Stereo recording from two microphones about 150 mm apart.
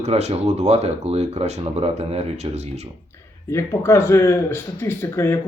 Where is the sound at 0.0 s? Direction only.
45° right (ahead or behind).